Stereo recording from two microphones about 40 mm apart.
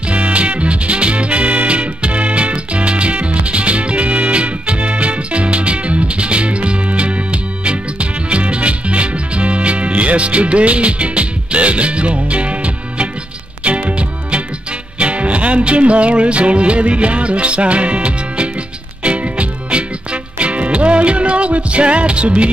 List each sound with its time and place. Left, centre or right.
0.1 s music: right